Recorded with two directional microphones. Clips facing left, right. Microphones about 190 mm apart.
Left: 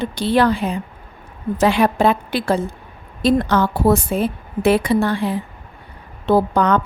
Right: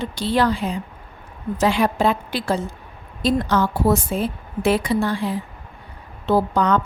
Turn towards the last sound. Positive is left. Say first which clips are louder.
# left 2 dB
turn(degrees=60)  # may be behind; listen again after turning